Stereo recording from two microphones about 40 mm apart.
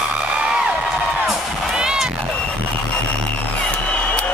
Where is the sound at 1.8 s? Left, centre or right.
Centre.